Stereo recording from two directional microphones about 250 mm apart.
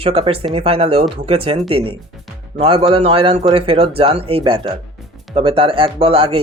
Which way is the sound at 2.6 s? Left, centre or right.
Right.